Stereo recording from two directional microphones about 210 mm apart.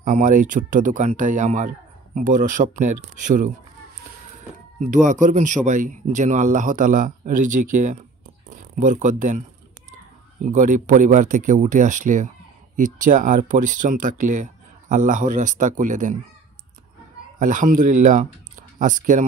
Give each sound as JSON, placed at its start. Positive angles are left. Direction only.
{"t": 0.0, "sound": "speech", "side_deg": -35}
{"t": 4.7, "sound": "speech", "side_deg": -35}
{"t": 10.4, "sound": "speech", "side_deg": -35}
{"t": 17.4, "sound": "speech", "side_deg": -40}